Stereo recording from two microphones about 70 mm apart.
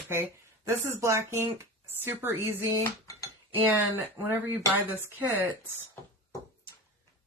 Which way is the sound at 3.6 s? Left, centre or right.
Right.